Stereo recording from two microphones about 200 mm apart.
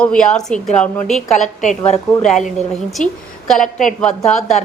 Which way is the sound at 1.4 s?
40° left (ahead or behind).